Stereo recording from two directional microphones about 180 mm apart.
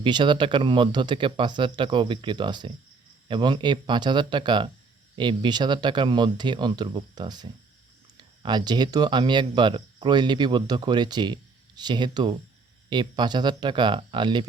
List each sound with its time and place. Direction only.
0.0 s speech: 25° right (ahead or behind)
8.4 s speech: 25° right (ahead or behind)